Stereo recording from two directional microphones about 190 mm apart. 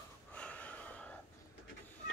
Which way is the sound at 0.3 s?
5° left (ahead or behind).